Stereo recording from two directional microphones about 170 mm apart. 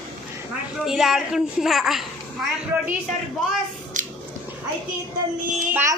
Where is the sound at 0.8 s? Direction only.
Centre (ahead or behind).